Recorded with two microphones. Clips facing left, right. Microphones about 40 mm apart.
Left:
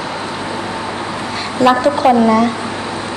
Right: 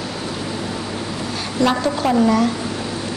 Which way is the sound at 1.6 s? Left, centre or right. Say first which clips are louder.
Left 7 dB; left.